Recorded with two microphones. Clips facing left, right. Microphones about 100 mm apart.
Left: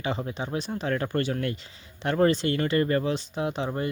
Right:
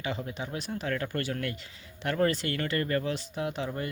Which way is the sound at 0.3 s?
30° left (ahead or behind).